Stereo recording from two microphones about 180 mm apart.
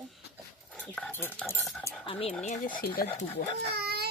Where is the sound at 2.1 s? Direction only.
30° left (ahead or behind).